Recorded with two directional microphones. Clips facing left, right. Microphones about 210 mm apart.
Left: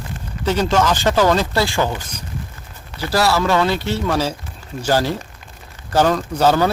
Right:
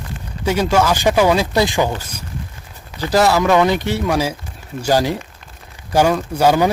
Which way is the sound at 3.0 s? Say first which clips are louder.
Right 3 dB; 20° right (ahead or behind).